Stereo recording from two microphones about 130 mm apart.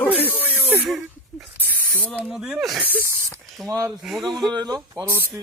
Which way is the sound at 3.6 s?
25° right (ahead or behind).